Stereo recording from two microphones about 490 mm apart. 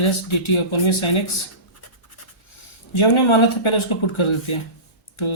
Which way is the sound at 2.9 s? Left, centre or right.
Left.